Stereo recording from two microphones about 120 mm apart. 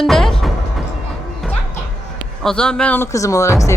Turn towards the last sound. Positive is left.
turn(degrees=25)  # may be behind; listen again after turning